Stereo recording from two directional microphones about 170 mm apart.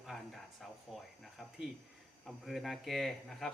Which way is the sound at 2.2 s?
Centre (ahead or behind).